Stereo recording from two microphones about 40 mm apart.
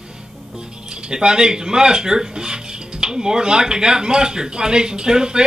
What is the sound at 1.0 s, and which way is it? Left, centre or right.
Speech, centre.